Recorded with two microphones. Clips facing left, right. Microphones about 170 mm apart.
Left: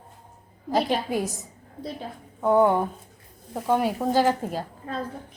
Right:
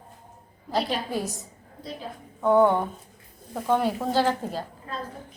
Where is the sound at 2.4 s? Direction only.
10° left (ahead or behind).